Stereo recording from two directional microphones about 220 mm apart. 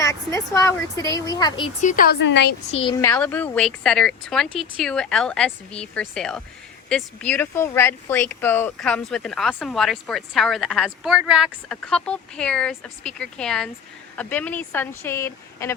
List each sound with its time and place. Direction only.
0.0 s speech: 15° left (ahead or behind)
1.8 s speech: 35° left (ahead or behind)
3.0 s speech: 10° left (ahead or behind)